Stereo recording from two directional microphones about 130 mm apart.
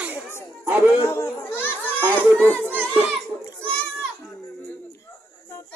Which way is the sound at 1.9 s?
15° left (ahead or behind).